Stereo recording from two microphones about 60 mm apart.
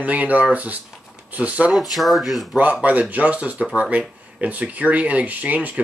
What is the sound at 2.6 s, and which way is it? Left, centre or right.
Speech, right.